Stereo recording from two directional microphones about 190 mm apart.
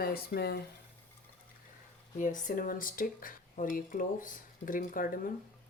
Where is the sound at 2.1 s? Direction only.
45° left (ahead or behind).